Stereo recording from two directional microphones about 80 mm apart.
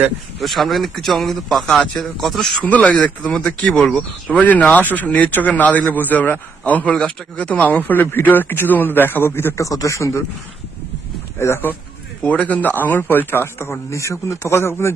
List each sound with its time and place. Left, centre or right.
0.3 s speech: centre
2.6 s speech: centre
4.4 s speech: centre
9.6 s speech: left
11.3 s speech: left
12.2 s speech: centre; by 14.9 s left